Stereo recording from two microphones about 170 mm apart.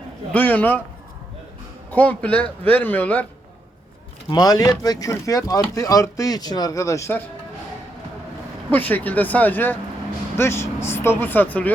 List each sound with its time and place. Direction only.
0.3 s a man's voice: 10° left (ahead or behind)
1.9 s a man's voice: 10° left (ahead or behind)
4.3 s speech: 25° left (ahead or behind)
8.7 s a man's voice: 10° left (ahead or behind)